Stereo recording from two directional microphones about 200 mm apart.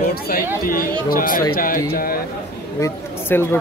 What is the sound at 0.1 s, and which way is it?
Speech, 45° left (ahead or behind).